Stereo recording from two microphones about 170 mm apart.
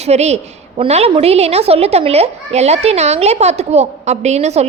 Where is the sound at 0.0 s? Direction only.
40° right (ahead or behind).